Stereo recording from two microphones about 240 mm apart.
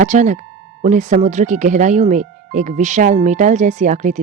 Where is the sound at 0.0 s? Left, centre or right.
Right.